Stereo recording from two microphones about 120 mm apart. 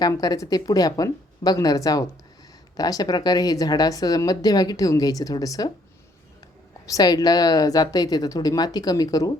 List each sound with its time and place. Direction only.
0.0 s speech: 30° left (ahead or behind)
6.8 s speech: 30° left (ahead or behind)